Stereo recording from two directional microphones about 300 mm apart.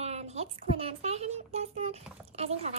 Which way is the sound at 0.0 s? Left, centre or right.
Right.